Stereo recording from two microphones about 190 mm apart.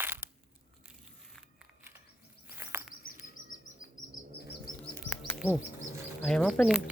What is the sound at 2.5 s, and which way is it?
Chirp, 10° right (ahead or behind).